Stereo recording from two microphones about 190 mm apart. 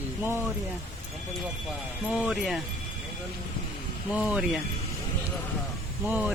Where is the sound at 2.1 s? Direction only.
Centre (ahead or behind).